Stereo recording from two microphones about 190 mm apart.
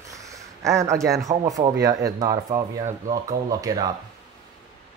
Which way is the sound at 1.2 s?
20° right (ahead or behind).